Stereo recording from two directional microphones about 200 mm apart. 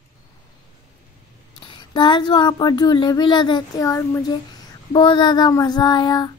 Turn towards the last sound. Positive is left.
turn(degrees=20)  # may be behind; listen again after turning